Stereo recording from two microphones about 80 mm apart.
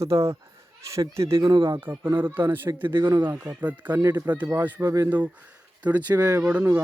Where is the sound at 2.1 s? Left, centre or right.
Right.